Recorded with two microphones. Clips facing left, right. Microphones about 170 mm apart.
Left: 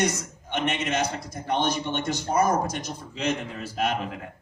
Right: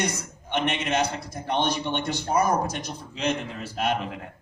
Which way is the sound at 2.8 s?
55° right (ahead or behind).